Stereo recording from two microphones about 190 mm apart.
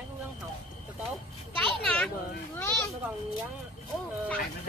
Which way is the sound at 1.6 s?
5° left (ahead or behind).